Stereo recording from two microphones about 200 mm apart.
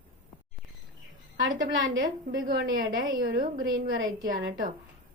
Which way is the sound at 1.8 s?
75° right (ahead or behind).